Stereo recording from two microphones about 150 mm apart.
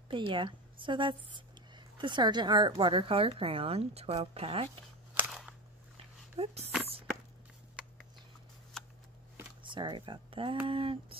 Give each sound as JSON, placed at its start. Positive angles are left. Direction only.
{"t": 0.1, "sound": "a woman's voice", "side_deg": -35}
{"t": 5.1, "sound": "a sound", "side_deg": -5}
{"t": 6.3, "sound": "speech", "side_deg": -45}
{"t": 9.6, "sound": "a woman's voice", "side_deg": -30}